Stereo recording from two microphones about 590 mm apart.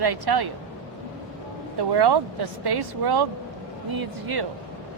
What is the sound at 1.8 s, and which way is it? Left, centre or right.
A man's voice, right.